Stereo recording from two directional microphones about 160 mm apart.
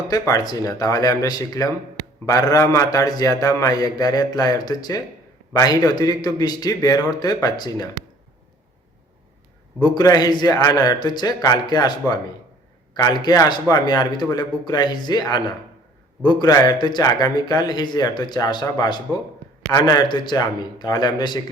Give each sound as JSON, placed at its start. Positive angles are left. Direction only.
{"t": 0.1, "sound": "speech", "side_deg": 25}
{"t": 9.8, "sound": "speech", "side_deg": 25}